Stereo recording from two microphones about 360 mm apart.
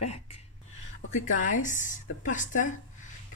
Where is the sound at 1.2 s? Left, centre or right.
Left.